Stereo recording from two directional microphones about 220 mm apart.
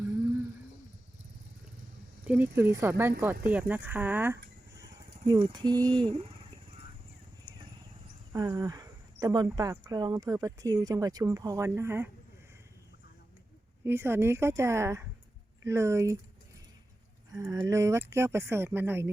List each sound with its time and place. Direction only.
2.2 s speech: 10° right (ahead or behind)
5.2 s speech: 20° right (ahead or behind)
8.3 s speech: 15° right (ahead or behind)
13.8 s speech: 10° right (ahead or behind)
17.3 s speech: 15° right (ahead or behind)